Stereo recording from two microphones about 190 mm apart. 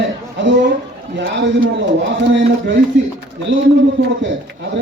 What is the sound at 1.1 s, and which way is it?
Speech, 70° right (ahead or behind).